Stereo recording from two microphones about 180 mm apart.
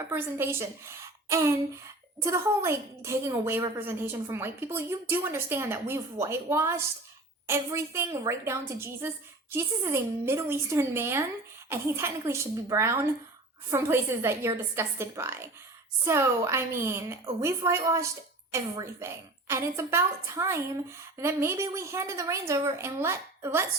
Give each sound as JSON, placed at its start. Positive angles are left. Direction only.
{"t": 0.0, "sound": "a woman's voice", "side_deg": -10}